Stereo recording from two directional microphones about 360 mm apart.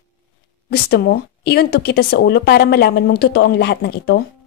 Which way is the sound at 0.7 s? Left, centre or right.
Left.